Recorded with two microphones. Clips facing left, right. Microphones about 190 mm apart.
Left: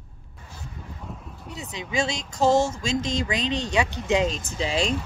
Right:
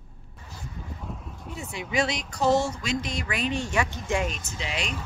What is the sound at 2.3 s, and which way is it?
A woman's voice, 25° left (ahead or behind).